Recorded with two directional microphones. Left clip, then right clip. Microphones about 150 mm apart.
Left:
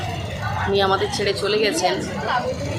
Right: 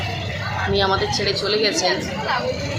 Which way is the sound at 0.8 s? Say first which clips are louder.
Even; 10° left (ahead or behind).